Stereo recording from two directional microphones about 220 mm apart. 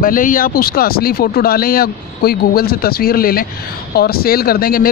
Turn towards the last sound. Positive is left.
turn(degrees=40)  # may be behind; listen again after turning